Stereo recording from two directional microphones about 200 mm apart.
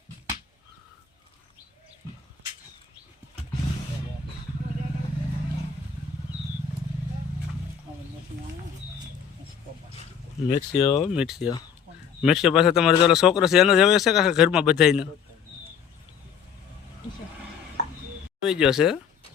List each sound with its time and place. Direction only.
10.5 s speech: 30° left (ahead or behind)
11.1 s speech: 5° right (ahead or behind)
18.4 s speech: 5° right (ahead or behind)